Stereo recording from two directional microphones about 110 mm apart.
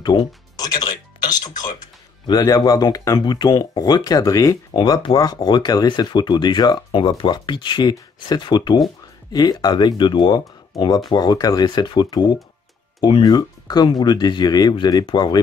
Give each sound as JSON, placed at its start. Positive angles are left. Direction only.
{"t": 0.0, "sound": "speech", "side_deg": 45}